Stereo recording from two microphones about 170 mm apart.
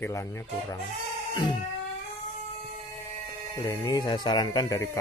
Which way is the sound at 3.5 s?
15° left (ahead or behind).